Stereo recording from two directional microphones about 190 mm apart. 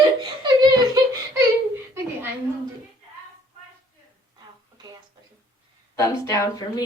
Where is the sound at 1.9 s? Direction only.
10° right (ahead or behind).